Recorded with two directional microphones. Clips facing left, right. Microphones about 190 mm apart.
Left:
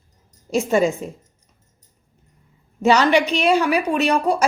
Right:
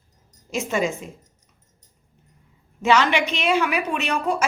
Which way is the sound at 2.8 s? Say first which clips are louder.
Left 4 dB; 35° left (ahead or behind).